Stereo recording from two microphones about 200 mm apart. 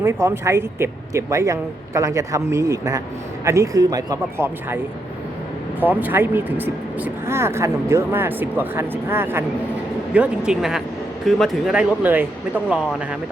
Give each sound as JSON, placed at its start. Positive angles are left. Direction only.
{"t": 0.0, "sound": "speech", "side_deg": -15}
{"t": 5.8, "sound": "speech", "side_deg": -10}